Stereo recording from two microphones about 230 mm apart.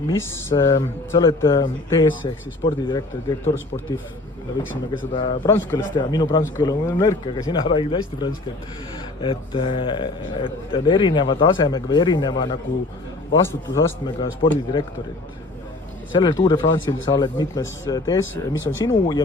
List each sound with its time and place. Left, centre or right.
0.1 s speech: centre
5.1 s a man's voice: left
16.1 s speech: centre
18.5 s speech: left
18.9 s speech: centre